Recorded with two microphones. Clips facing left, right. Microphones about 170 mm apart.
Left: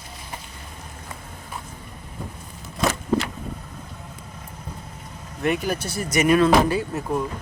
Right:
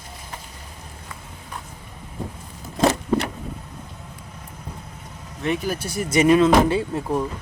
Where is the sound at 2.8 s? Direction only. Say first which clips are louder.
Right 3 dB; 35° right (ahead or behind).